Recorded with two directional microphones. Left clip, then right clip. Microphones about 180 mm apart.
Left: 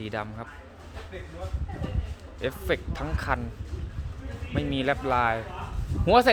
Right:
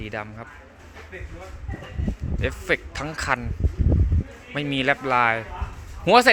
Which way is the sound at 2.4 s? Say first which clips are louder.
Right 4 dB; 15° right (ahead or behind).